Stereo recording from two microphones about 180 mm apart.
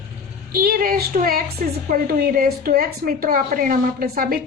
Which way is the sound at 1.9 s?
55° right (ahead or behind).